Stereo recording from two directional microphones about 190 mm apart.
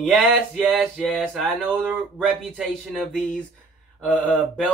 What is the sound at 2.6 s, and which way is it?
Speech, 5° left (ahead or behind).